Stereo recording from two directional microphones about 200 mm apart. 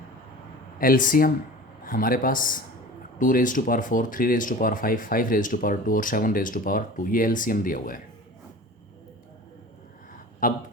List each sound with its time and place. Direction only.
0.8 s speech: 45° left (ahead or behind)
10.4 s speech: 40° left (ahead or behind)